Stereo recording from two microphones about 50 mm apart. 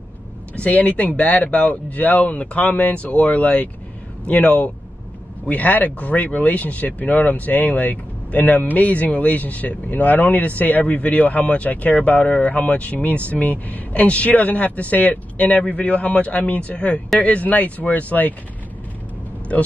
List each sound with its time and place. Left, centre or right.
0.6 s speech: left
19.5 s speech: left